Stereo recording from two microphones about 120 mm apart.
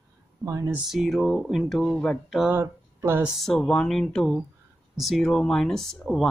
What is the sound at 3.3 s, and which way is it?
Speech, 5° left (ahead or behind).